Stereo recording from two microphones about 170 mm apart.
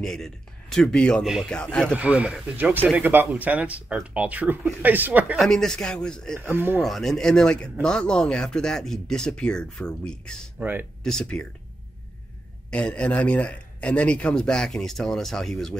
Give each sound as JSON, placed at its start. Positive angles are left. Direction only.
{"t": 0.0, "sound": "a man's voice", "side_deg": 0}
{"t": 2.0, "sound": "speech", "side_deg": -10}
{"t": 5.4, "sound": "a man's voice", "side_deg": 0}
{"t": 6.3, "sound": "speech", "side_deg": -10}
{"t": 6.8, "sound": "a man's voice", "side_deg": 0}
{"t": 10.6, "sound": "speech", "side_deg": -10}
{"t": 11.1, "sound": "a man's voice", "side_deg": 5}
{"t": 12.7, "sound": "a man's voice", "side_deg": 5}